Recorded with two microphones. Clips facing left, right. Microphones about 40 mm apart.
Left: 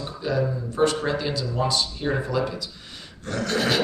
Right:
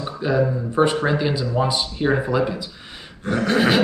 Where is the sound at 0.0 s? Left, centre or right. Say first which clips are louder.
Right 5 dB; right.